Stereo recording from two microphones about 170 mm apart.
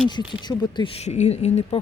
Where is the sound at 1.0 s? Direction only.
40° left (ahead or behind).